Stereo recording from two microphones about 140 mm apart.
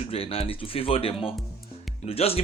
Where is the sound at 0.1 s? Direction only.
45° left (ahead or behind).